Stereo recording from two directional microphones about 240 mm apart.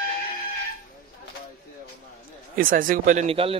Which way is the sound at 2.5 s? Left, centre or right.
Right.